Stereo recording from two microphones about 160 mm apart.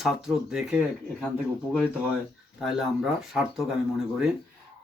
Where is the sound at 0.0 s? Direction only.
Centre (ahead or behind).